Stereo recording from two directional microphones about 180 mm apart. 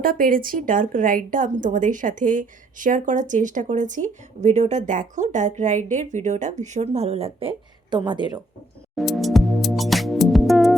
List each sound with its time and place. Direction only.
0.0 s a woman's voice: 50° right (ahead or behind); by 8.4 s 25° right (ahead or behind)
9.0 s music: centre (ahead or behind)